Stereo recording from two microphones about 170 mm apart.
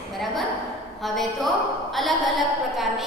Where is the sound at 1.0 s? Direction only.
Centre (ahead or behind).